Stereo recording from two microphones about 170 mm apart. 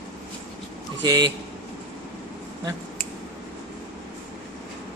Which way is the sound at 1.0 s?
25° right (ahead or behind).